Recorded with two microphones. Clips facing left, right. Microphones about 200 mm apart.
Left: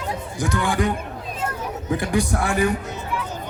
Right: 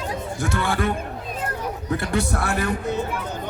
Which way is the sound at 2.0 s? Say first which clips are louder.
Left 3 dB; 15° left (ahead or behind).